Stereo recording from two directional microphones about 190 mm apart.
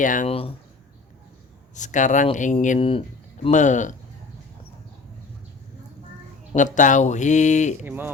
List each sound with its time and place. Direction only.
0.0 s speech: 45° left (ahead or behind)
0.3 s speech: 30° left (ahead or behind)
1.7 s speech: 40° left (ahead or behind)
6.5 s speech: 40° left (ahead or behind)
7.9 s speech: 10° right (ahead or behind)